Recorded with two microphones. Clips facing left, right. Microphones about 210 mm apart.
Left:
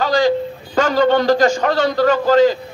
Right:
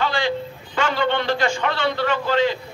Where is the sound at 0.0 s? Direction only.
40° left (ahead or behind).